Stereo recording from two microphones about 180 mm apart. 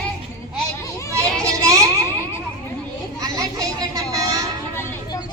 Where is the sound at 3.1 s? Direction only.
20° right (ahead or behind).